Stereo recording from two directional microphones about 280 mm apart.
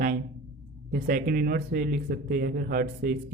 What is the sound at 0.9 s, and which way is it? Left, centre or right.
Speech, right.